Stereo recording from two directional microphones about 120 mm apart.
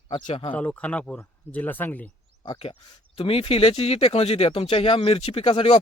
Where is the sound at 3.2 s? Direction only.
50° left (ahead or behind).